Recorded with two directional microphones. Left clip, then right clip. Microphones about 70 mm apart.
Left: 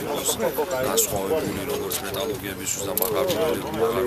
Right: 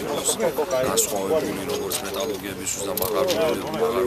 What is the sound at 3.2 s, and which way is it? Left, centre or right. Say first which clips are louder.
Speech: right 1 dB; right.